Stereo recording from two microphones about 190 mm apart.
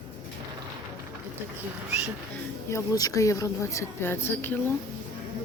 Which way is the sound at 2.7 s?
20° left (ahead or behind).